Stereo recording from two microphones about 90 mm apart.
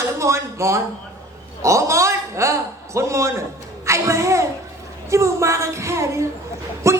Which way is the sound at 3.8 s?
35° right (ahead or behind).